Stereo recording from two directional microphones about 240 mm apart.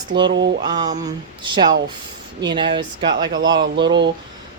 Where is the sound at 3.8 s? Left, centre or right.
Right.